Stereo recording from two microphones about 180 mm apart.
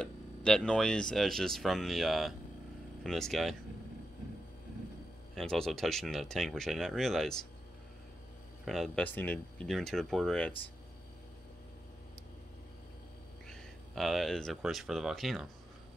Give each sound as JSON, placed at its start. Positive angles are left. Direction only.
{"t": 0.0, "sound": "speech", "side_deg": 5}
{"t": 5.3, "sound": "speech", "side_deg": 0}
{"t": 8.6, "sound": "speech", "side_deg": 0}
{"t": 13.5, "sound": "speech", "side_deg": 0}